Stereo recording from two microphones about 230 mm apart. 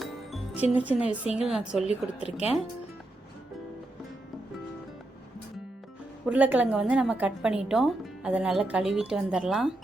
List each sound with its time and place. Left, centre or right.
0.0 s music: centre
0.7 s a woman's voice: centre
2.2 s speech: left
6.2 s a woman's voice: centre